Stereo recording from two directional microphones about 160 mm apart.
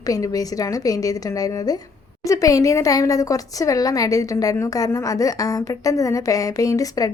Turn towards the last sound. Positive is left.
turn(degrees=20)  # may be behind; listen again after turning